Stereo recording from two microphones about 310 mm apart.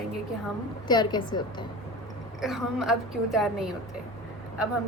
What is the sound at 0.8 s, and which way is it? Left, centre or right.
Speech, centre.